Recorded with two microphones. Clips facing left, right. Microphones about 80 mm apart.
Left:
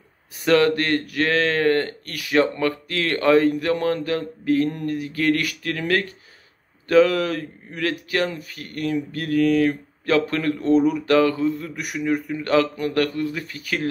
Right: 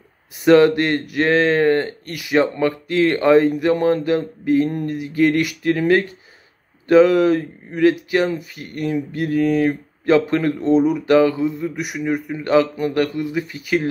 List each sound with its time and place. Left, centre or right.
0.3 s speech: right